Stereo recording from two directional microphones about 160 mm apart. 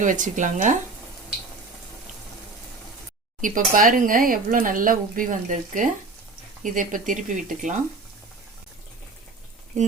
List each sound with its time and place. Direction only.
0.0 s speech: 55° right (ahead or behind)
3.4 s speech: 55° right (ahead or behind)